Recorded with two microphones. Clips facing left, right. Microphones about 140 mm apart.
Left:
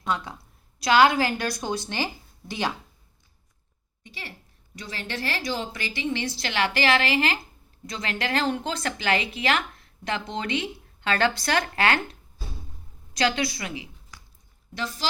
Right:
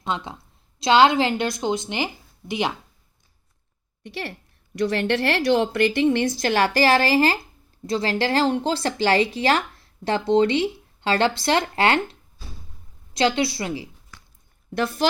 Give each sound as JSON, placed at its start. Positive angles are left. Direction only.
{"t": 0.0, "sound": "a woman's voice", "side_deg": -25}
{"t": 4.0, "sound": "a woman's voice", "side_deg": -65}
{"t": 13.1, "sound": "a woman's voice", "side_deg": -25}
{"t": 14.1, "sound": "a sound", "side_deg": 10}
{"t": 14.8, "sound": "a woman's voice", "side_deg": -55}